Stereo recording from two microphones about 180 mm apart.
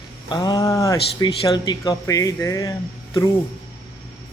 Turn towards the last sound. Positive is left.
turn(degrees=20)  # may be behind; listen again after turning